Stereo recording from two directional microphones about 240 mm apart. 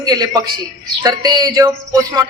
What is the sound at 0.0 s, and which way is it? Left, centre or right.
A man's voice, centre.